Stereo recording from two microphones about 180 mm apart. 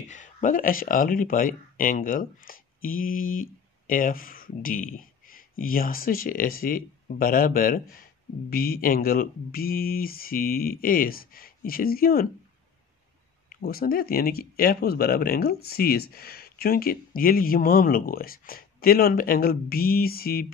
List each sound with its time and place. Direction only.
0.0 s speech: 45° left (ahead or behind)
13.6 s speech: 55° left (ahead or behind)